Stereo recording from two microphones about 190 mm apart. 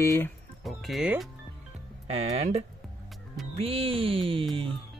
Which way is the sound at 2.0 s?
35° right (ahead or behind).